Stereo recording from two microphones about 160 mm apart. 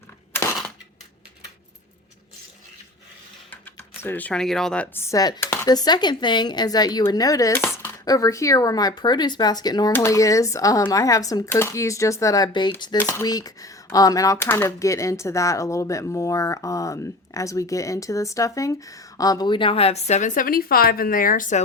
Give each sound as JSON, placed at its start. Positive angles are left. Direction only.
{"t": 4.0, "sound": "speech", "side_deg": 10}